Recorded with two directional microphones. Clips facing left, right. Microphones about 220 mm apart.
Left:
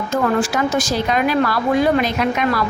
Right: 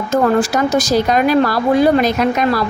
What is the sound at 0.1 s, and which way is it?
A woman's voice, 40° right (ahead or behind).